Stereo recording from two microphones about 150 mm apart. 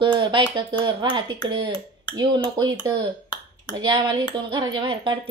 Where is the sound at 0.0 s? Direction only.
35° right (ahead or behind).